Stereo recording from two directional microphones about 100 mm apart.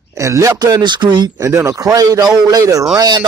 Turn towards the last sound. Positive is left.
turn(degrees=-45)  # may be behind; listen again after turning